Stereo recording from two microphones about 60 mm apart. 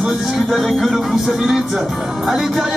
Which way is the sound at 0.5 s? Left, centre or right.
Centre.